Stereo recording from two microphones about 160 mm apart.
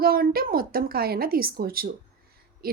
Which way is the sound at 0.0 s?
70° right (ahead or behind).